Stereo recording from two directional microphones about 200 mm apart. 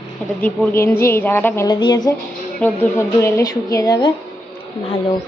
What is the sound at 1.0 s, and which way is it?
A woman's voice, 10° left (ahead or behind).